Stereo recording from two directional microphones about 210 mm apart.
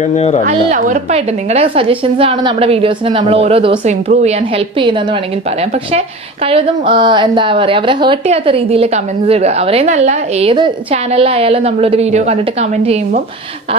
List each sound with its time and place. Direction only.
0.1 s speech: 30° left (ahead or behind)
0.5 s a woman's voice: 35° right (ahead or behind)
5.9 s a woman's voice: 25° right (ahead or behind)